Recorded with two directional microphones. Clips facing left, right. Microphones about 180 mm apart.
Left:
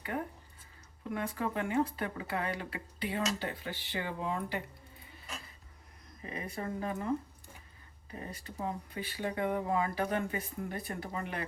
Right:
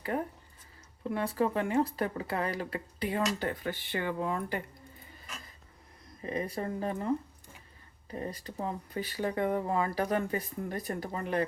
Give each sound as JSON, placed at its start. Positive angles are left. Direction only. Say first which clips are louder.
{"t": 1.1, "sound": "speech", "louder": "right 5 dB", "side_deg": -35}
{"t": 6.2, "sound": "speech", "louder": "right 5 dB", "side_deg": -35}
{"t": 8.3, "sound": "speech", "louder": "left 2 dB", "side_deg": -35}